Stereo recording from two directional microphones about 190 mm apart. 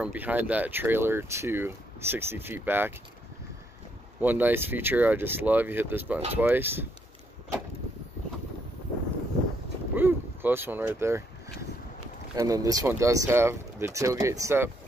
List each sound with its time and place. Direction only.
0.0 s speech: 10° right (ahead or behind)
4.2 s speech: 10° right (ahead or behind)
9.9 s a sound: 10° right (ahead or behind)
12.4 s speech: 20° right (ahead or behind)